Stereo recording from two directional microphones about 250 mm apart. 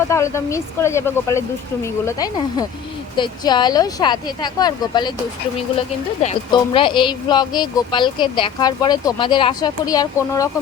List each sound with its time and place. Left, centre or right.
0.1 s speech: centre
6.2 s speech: centre